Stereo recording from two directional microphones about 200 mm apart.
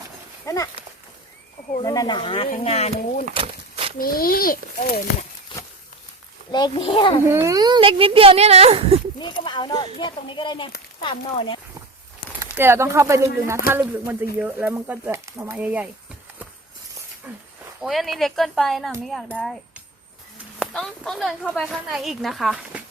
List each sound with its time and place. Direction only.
0.4 s speech: 15° left (ahead or behind); by 3.2 s 30° left (ahead or behind)
3.3 s a sound: 30° right (ahead or behind)
3.9 s a child's voice: 45° left (ahead or behind)
6.5 s speech: 20° left (ahead or behind)
7.3 s speech: 15° right (ahead or behind); by 9.0 s 30° right (ahead or behind)
9.1 s speech: 25° left (ahead or behind)
12.5 s speech: 10° right (ahead or behind)
17.3 s a sound: 10° right (ahead or behind)
17.8 s a woman's voice: centre (ahead or behind)